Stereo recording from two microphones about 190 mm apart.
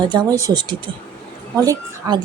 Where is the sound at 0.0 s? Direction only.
20° right (ahead or behind).